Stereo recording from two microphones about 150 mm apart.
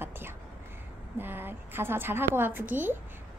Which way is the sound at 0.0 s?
15° right (ahead or behind).